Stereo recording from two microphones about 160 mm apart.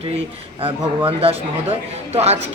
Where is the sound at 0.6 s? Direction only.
35° right (ahead or behind).